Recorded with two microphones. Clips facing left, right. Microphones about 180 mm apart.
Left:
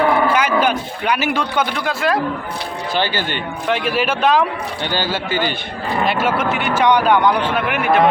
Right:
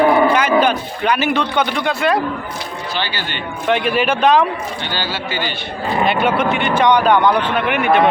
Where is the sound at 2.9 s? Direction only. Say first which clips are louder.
Left 5 dB; 50° left (ahead or behind).